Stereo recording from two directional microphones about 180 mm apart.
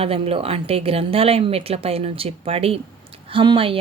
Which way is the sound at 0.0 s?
35° right (ahead or behind).